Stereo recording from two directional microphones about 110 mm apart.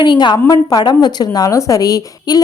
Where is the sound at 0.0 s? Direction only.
45° left (ahead or behind).